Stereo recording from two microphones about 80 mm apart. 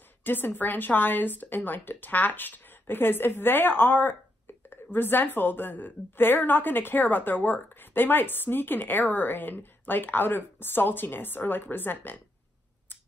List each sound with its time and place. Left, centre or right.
0.2 s a woman's voice: left